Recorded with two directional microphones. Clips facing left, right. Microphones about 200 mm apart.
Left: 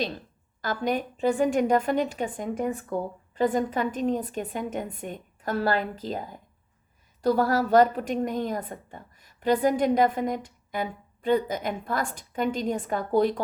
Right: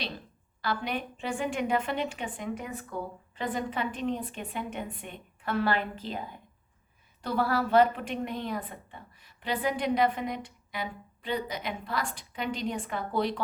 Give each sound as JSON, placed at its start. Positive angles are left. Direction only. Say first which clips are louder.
{"t": 0.6, "sound": "a woman's voice", "louder": "left 5 dB", "side_deg": 45}